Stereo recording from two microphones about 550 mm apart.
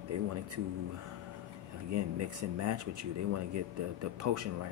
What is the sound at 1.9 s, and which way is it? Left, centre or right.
Speech, right.